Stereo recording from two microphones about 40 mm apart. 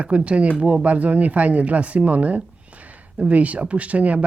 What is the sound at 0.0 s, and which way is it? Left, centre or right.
Speech, right.